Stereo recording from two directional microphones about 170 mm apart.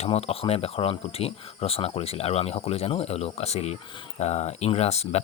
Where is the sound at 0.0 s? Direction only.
35° left (ahead or behind).